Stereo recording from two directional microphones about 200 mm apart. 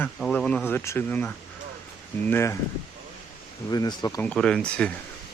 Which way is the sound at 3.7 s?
20° left (ahead or behind).